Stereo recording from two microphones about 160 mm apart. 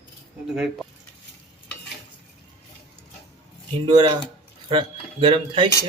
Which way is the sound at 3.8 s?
25° right (ahead or behind).